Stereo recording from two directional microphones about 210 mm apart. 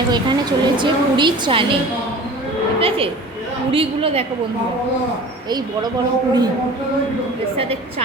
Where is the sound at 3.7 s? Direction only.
25° right (ahead or behind).